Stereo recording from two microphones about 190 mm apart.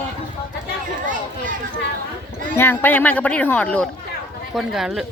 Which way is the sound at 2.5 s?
10° left (ahead or behind).